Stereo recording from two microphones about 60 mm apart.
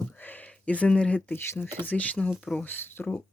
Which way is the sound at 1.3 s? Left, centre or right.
Left.